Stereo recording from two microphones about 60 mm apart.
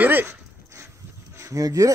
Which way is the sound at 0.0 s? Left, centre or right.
Right.